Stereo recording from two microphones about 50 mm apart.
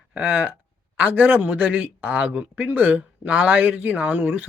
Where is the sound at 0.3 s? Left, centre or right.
Right.